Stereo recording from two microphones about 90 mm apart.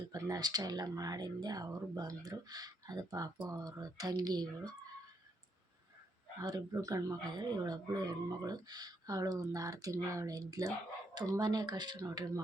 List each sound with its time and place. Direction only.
0.1 s speech: 40° right (ahead or behind)
6.4 s speech: 40° right (ahead or behind)